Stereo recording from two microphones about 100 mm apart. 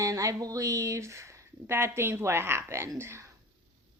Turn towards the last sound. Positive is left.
turn(degrees=-25)  # may be behind; listen again after turning